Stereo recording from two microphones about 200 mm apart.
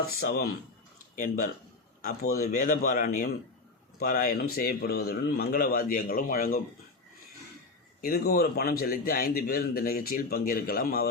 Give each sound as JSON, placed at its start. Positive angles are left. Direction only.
{"t": 0.2, "sound": "a man's voice", "side_deg": 50}
{"t": 1.1, "sound": "a man's voice", "side_deg": 40}
{"t": 8.0, "sound": "a man's voice", "side_deg": 50}